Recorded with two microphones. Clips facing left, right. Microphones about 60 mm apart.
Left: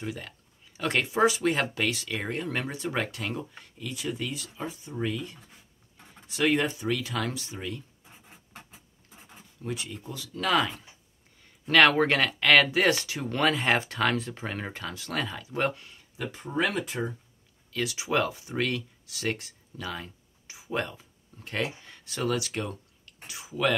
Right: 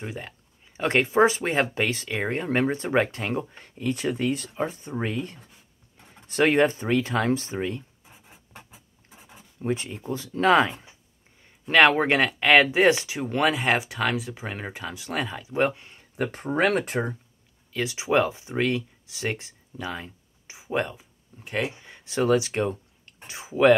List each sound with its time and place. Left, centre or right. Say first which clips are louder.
0.0 s speech: right 1 dB; right
9.6 s speech: right 7 dB; right
16.2 s speech: right 5 dB; right
17.7 s speech: right 4 dB; right